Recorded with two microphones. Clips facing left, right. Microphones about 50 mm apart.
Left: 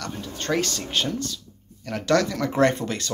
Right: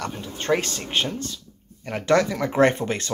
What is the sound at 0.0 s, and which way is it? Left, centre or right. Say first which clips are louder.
Speech: right 2 dB; right.